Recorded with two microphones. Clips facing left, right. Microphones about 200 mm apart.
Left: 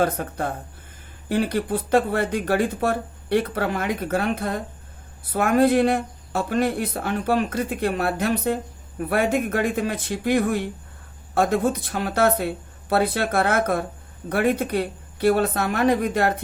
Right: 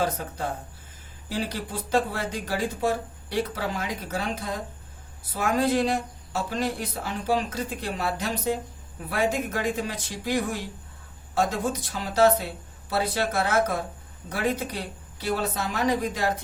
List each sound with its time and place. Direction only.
0.0 s speech: 55° left (ahead or behind)